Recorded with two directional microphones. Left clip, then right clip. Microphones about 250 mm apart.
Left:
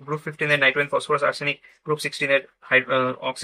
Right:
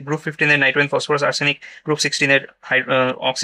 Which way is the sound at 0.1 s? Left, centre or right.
Right.